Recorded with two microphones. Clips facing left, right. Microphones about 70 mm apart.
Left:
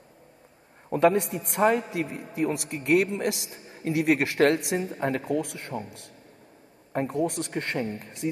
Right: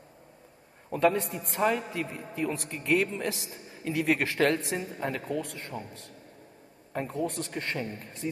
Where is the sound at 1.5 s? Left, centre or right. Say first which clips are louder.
Left 5 dB; left.